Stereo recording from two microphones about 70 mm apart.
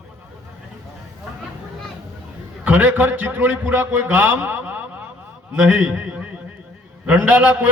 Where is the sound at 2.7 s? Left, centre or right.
Right.